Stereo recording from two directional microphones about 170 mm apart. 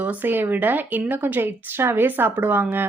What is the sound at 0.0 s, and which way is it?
A woman's voice, 10° right (ahead or behind).